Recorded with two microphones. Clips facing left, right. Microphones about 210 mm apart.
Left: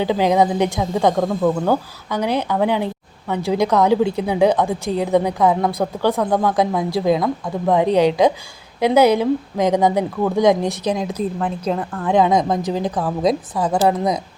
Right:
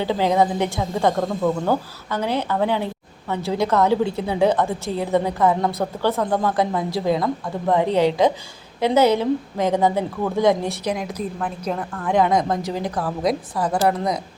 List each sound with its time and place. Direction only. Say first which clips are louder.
0.0 s a woman's voice: left 3 dB; 15° left (ahead or behind)